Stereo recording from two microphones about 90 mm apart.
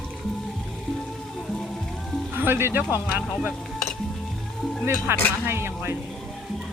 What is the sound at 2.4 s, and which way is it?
Speech, 25° right (ahead or behind).